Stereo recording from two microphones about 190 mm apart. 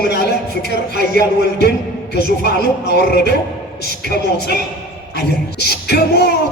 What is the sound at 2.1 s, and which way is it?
Speech, 55° left (ahead or behind).